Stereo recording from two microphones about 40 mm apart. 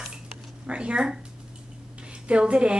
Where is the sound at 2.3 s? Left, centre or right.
Right.